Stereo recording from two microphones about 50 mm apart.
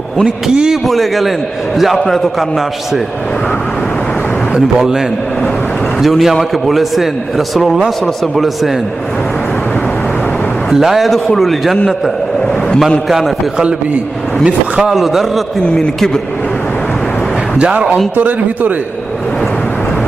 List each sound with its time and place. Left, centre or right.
0.5 s a man's voice: centre
0.9 s a man's voice: centre
4.5 s a man's voice: centre
10.7 s a man's voice: centre
13.1 s a man's voice: centre
14.4 s a man's voice: centre
17.6 s speech: right
18.2 s speech: right